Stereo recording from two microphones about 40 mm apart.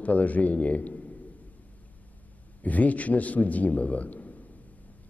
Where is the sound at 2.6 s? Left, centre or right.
Left.